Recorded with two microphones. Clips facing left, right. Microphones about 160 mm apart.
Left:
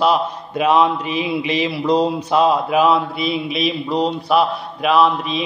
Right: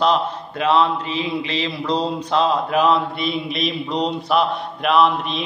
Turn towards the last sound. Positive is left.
turn(degrees=0)  # may be behind; listen again after turning